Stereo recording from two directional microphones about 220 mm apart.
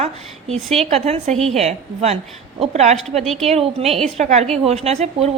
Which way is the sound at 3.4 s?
30° right (ahead or behind).